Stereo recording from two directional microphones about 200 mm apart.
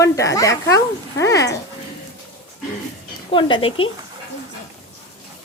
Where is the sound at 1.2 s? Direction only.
15° left (ahead or behind).